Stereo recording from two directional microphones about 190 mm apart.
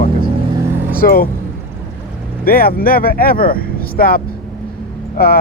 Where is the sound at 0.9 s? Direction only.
50° left (ahead or behind).